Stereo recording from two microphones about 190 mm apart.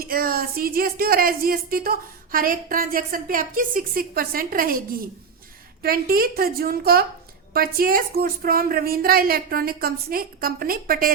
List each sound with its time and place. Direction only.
0.0 s speech: 50° right (ahead or behind)